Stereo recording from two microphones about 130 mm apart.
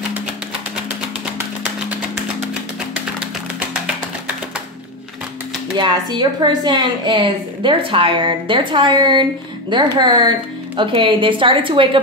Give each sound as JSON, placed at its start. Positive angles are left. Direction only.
{"t": 5.8, "sound": "a woman's voice", "side_deg": -35}